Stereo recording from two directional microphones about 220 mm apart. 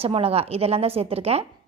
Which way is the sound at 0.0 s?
25° right (ahead or behind).